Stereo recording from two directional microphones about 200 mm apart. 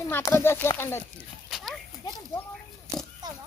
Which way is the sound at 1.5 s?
Centre (ahead or behind).